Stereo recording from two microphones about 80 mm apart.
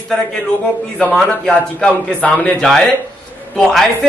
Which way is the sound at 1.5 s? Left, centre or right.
Centre.